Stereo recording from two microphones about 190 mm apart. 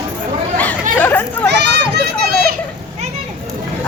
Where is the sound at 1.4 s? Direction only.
60° right (ahead or behind).